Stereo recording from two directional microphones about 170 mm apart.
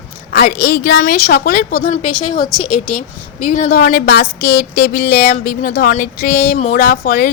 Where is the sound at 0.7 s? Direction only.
75° left (ahead or behind).